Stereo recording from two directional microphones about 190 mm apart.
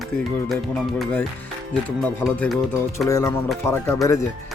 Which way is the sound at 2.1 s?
5° left (ahead or behind).